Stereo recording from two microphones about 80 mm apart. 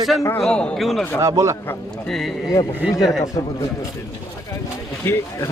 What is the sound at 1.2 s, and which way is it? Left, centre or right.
Speech, right.